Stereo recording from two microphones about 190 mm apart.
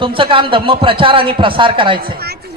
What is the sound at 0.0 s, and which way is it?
A man's voice, 25° right (ahead or behind).